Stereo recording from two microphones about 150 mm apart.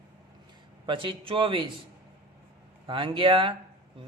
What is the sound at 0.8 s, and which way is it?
Speech, 35° right (ahead or behind).